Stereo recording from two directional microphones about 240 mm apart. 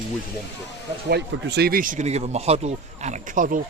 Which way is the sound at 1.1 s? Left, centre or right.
Right.